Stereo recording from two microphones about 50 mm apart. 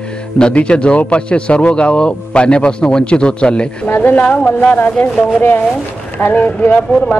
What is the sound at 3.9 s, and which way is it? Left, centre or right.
Speech, left.